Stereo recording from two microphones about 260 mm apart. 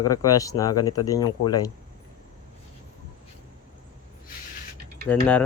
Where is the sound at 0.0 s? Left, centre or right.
Centre.